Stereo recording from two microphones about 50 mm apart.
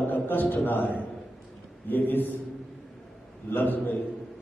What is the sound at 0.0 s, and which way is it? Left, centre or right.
A man's voice, left.